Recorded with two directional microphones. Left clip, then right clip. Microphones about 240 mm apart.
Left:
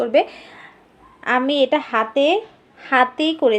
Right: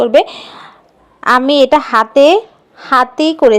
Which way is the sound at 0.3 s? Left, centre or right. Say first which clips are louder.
Right 9 dB; right.